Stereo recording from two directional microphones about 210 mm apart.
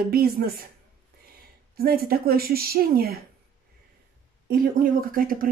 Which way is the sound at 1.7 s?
45° right (ahead or behind).